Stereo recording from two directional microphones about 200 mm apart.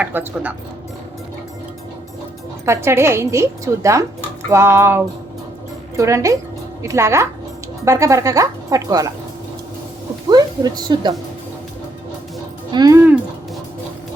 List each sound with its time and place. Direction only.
0.0 s a woman's voice: 10° right (ahead or behind)
2.6 s a woman's voice: 15° right (ahead or behind)
10.2 s a woman's voice: 20° right (ahead or behind)
12.7 s a woman's voice: 20° right (ahead or behind)